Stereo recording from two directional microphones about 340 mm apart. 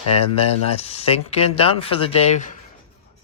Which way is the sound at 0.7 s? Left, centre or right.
Centre.